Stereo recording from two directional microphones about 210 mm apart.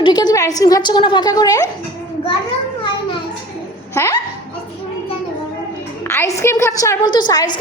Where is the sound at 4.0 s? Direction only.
15° left (ahead or behind).